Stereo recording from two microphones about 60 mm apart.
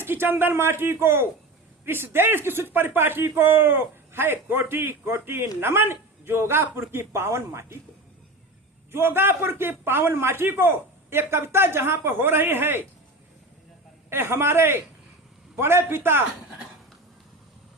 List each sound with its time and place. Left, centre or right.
0.0 s a man's voice: right
8.9 s a man's voice: right
14.1 s speech: right